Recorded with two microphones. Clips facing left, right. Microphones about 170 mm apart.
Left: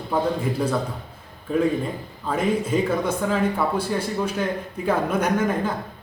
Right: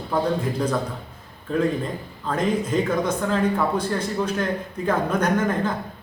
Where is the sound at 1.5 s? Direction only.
5° left (ahead or behind).